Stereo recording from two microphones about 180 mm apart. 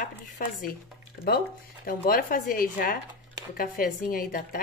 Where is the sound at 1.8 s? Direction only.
50° left (ahead or behind).